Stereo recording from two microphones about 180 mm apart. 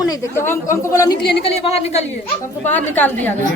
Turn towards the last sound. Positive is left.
turn(degrees=10)  # may be behind; listen again after turning